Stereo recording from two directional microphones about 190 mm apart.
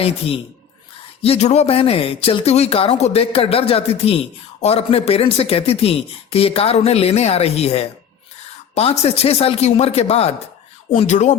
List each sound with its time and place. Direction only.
1.2 s speech: 35° left (ahead or behind)